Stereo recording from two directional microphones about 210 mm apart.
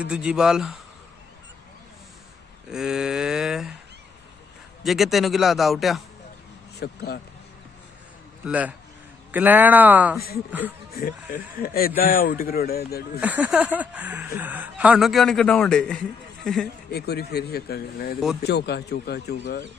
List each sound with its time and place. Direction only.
0.0 s speech: 5° right (ahead or behind)
2.7 s speech: 5° right (ahead or behind)
4.8 s speech: centre (ahead or behind)
6.8 s speech: 50° left (ahead or behind)
8.5 s speech: 5° right (ahead or behind)
11.0 s speech: 45° left (ahead or behind)
13.2 s speech: 5° right (ahead or behind)
16.9 s speech: 50° left (ahead or behind)